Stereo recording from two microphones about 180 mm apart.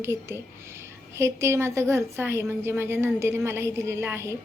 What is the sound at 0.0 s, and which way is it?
A woman's voice, 15° right (ahead or behind).